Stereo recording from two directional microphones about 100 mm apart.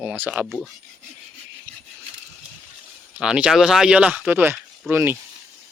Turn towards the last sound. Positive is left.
turn(degrees=-20)  # may be behind; listen again after turning